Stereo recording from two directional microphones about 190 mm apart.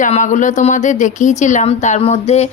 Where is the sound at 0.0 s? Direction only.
40° left (ahead or behind).